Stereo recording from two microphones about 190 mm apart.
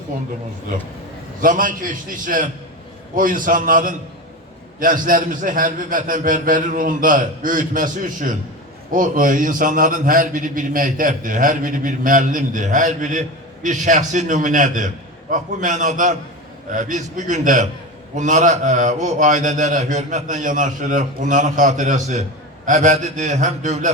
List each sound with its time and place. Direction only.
1.4 s a man's voice: 45° right (ahead or behind)